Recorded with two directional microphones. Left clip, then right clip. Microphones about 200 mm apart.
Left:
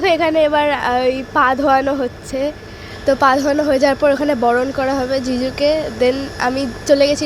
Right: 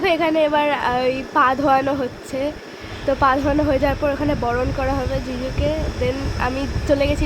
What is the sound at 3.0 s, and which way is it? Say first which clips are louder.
Speech: left 4 dB; 20° left (ahead or behind).